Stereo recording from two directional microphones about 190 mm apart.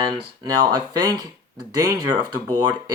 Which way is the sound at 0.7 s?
20° right (ahead or behind).